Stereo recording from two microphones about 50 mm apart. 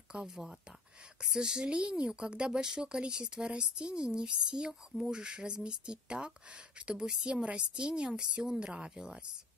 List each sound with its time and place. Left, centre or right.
0.1 s speech: centre